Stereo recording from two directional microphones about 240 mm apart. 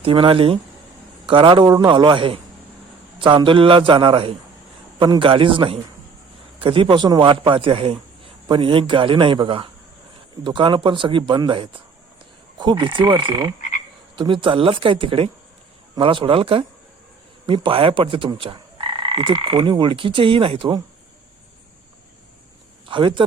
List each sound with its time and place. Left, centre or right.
0.0 s frog: right
13.6 s croak: left
14.2 s frog: right
22.9 s frog: centre